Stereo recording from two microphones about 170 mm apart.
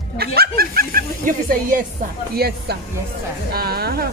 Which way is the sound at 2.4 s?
70° right (ahead or behind).